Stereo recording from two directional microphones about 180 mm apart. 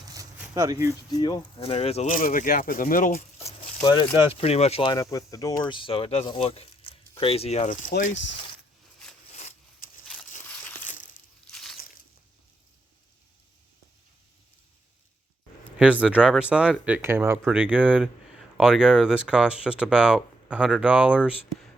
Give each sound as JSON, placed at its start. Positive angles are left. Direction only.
{"t": 0.5, "sound": "speech", "side_deg": -20}
{"t": 1.1, "sound": "speech", "side_deg": 25}
{"t": 1.5, "sound": "speech", "side_deg": 35}
{"t": 2.0, "sound": "speech", "side_deg": 50}
{"t": 9.3, "sound": "a sound", "side_deg": 40}
{"t": 11.5, "sound": "a sound", "side_deg": 0}
{"t": 15.8, "sound": "speech", "side_deg": -5}